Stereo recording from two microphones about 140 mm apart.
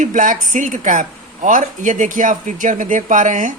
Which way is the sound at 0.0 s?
65° right (ahead or behind).